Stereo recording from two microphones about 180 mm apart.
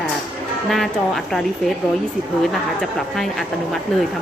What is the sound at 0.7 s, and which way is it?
Speech, centre (ahead or behind).